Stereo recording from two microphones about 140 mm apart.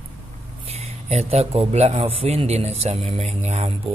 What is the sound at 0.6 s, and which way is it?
Speech, 50° right (ahead or behind).